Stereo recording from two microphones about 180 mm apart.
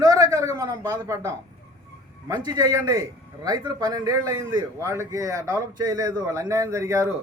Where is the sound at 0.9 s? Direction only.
15° right (ahead or behind).